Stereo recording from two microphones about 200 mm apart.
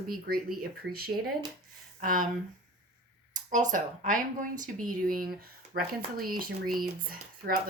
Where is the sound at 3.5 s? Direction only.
40° right (ahead or behind).